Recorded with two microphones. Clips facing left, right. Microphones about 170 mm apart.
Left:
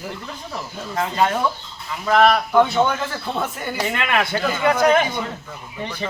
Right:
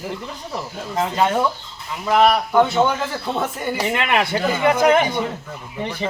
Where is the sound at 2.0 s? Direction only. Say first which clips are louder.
Even; 10° right (ahead or behind).